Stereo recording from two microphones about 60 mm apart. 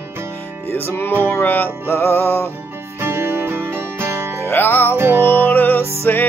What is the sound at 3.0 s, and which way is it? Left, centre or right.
Music, right.